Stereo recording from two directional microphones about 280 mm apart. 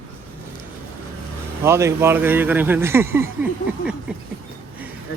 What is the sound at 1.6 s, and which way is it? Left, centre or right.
Speech, centre.